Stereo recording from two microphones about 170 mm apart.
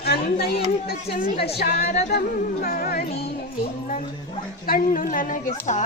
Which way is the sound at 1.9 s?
40° left (ahead or behind).